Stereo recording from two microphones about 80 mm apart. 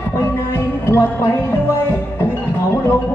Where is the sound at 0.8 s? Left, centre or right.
Left.